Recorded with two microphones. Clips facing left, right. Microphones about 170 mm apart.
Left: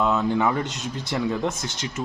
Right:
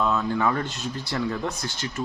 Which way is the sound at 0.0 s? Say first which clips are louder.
Left 2 dB; 20° left (ahead or behind).